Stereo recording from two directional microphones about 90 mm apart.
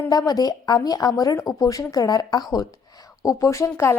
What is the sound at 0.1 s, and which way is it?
Speech, 45° left (ahead or behind).